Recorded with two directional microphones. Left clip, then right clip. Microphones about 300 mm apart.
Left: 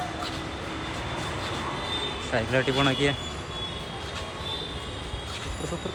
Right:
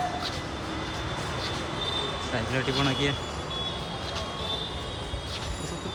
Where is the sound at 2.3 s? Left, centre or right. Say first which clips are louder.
Left 5 dB; centre.